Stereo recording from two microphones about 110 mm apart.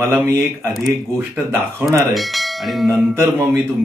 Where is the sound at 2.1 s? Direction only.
Centre (ahead or behind).